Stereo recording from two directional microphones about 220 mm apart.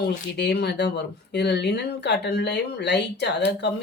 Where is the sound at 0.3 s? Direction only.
50° left (ahead or behind).